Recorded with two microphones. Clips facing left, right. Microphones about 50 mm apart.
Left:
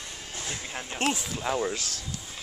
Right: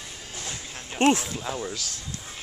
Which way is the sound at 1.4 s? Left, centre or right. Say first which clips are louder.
Left 4 dB; centre.